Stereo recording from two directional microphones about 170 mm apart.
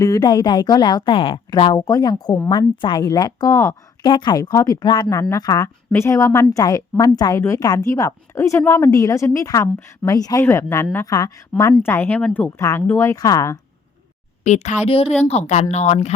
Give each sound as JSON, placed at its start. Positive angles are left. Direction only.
{"t": 0.0, "sound": "a woman's voice", "side_deg": 25}
{"t": 14.4, "sound": "a woman's voice", "side_deg": 45}